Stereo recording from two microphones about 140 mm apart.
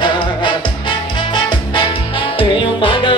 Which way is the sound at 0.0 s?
35° left (ahead or behind).